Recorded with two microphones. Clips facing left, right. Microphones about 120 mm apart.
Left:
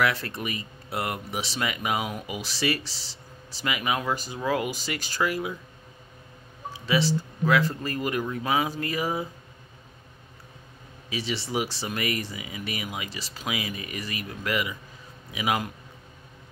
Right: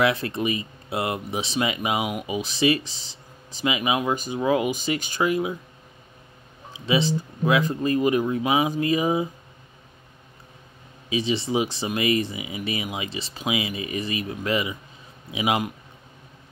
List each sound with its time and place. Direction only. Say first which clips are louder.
0.0 s speech: right 4 dB; 20° right (ahead or behind)
6.7 s speech: right 2 dB; 20° right (ahead or behind)
11.1 s speech: right 7 dB; 20° right (ahead or behind)